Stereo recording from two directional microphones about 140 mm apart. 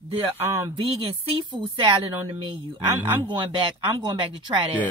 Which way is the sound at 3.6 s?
40° right (ahead or behind).